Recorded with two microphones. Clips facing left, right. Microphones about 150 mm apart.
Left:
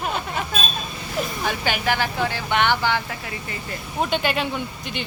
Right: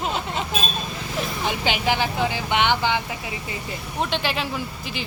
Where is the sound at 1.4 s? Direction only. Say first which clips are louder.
Right 2 dB; 15° right (ahead or behind).